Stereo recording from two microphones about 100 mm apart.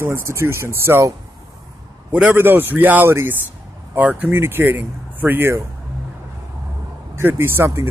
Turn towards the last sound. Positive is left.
turn(degrees=-25)  # may be behind; listen again after turning